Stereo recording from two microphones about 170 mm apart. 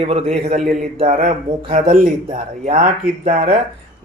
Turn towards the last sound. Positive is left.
turn(degrees=-35)  # may be behind; listen again after turning